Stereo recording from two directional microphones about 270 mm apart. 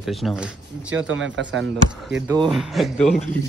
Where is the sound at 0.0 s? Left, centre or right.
Centre.